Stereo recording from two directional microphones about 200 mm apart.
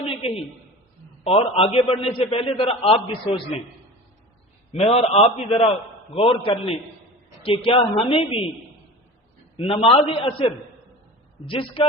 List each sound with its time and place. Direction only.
0.0 s a sound: 30° left (ahead or behind)
1.2 s a man's voice: 30° left (ahead or behind)
4.7 s a man's voice: 30° left (ahead or behind)
9.6 s a man's voice: 25° left (ahead or behind)